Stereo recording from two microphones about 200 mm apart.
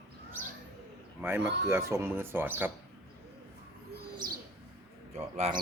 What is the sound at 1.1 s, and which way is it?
Speech, 10° right (ahead or behind).